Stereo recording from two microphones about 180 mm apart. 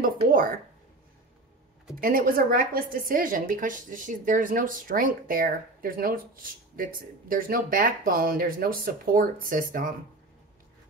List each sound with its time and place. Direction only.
0.0 s speech: 50° right (ahead or behind)
2.0 s a woman's voice: 50° right (ahead or behind)